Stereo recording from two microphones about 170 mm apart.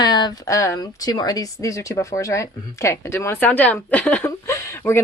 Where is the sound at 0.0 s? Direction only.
25° left (ahead or behind).